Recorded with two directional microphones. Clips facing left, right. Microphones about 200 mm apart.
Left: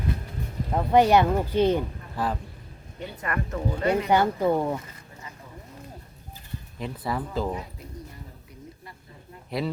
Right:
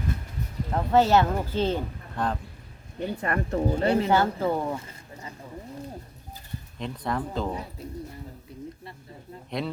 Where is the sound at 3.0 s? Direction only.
30° right (ahead or behind).